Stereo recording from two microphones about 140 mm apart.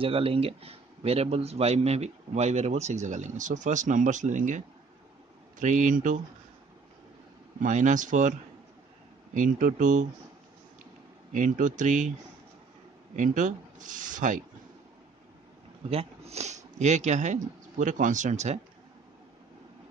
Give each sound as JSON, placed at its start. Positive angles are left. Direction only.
{"t": 0.0, "sound": "a man's voice", "side_deg": -40}
{"t": 7.6, "sound": "speech", "side_deg": -65}
{"t": 11.3, "sound": "speech", "side_deg": -65}
{"t": 13.1, "sound": "speech", "side_deg": -65}
{"t": 15.9, "sound": "speech", "side_deg": -45}